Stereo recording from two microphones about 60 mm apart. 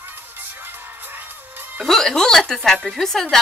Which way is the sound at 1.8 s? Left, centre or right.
Centre.